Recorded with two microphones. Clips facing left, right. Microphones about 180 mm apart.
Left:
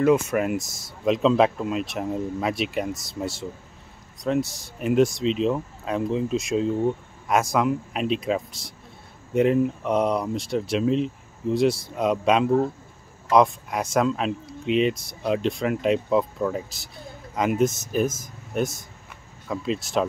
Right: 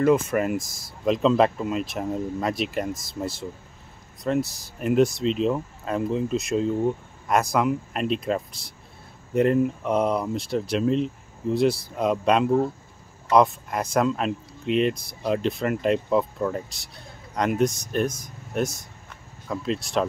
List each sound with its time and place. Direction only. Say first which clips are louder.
0.0 s speech: even; centre (ahead or behind)